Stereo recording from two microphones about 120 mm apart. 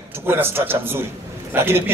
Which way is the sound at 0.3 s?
20° right (ahead or behind).